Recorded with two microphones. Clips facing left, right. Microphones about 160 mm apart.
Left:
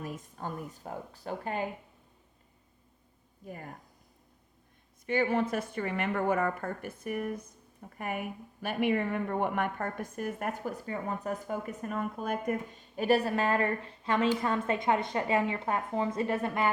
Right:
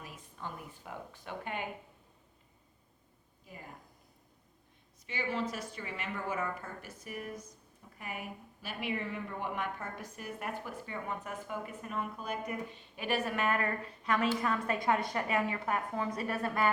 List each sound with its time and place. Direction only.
0.0 s speech: 45° left (ahead or behind)
3.4 s speech: 50° left (ahead or behind)
5.0 s a woman's voice: 55° left (ahead or behind); by 16.6 s 20° left (ahead or behind)